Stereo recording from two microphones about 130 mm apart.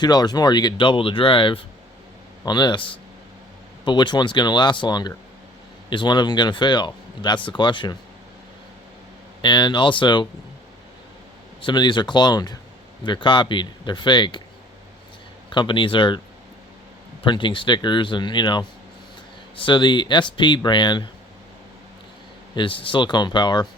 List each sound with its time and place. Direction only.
0.0 s speech: 30° left (ahead or behind)
9.4 s speech: 35° left (ahead or behind)
11.6 s speech: 35° left (ahead or behind)
15.4 s speech: 40° left (ahead or behind)
17.2 s speech: 40° left (ahead or behind)
22.5 s speech: 40° left (ahead or behind)